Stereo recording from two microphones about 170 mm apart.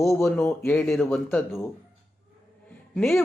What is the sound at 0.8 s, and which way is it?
Speech, 5° left (ahead or behind).